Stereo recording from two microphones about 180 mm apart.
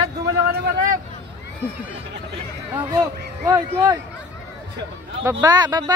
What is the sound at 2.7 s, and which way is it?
Speech, 15° right (ahead or behind).